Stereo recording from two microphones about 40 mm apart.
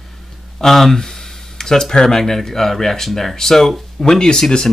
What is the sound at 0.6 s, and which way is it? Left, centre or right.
Speech, centre.